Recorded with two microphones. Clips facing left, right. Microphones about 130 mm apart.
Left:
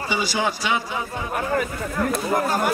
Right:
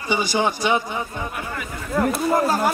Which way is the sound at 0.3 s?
20° right (ahead or behind).